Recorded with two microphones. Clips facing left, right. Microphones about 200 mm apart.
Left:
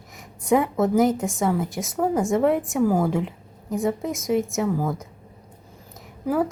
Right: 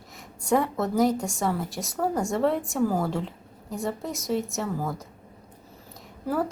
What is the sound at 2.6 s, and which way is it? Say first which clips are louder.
Speech: left 3 dB; centre (ahead or behind).